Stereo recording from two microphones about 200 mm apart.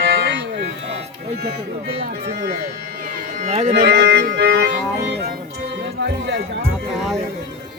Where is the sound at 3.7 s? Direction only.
55° right (ahead or behind).